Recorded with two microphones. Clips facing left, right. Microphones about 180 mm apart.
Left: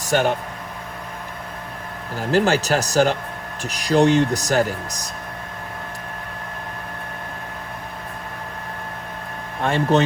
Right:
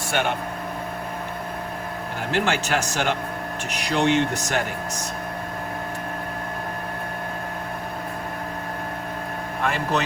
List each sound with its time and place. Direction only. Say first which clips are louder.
0.0 s speech: left 5 dB; 40° left (ahead or behind)
2.3 s speech: left 5 dB; 40° left (ahead or behind)
9.6 s speech: left 6 dB; 30° left (ahead or behind)